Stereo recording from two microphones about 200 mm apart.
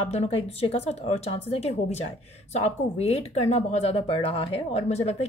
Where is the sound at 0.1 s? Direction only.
30° left (ahead or behind).